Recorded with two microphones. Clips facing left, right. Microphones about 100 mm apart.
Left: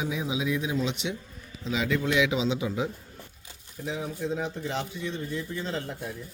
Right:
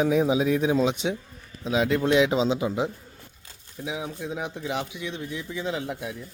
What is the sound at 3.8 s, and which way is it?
Speech, 10° right (ahead or behind).